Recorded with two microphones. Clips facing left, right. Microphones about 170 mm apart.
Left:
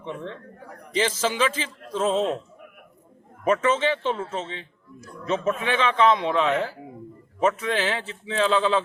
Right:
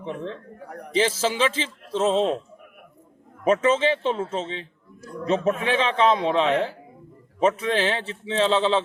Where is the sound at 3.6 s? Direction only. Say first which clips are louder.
Right 2 dB; 30° right (ahead or behind).